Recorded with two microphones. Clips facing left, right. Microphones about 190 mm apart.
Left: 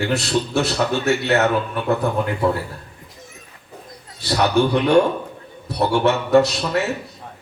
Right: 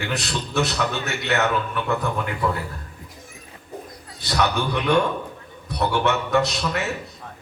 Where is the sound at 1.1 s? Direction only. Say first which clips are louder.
Left 9 dB; 35° left (ahead or behind).